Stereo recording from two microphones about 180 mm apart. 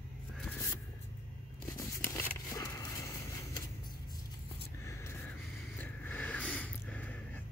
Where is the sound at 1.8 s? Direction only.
15° left (ahead or behind).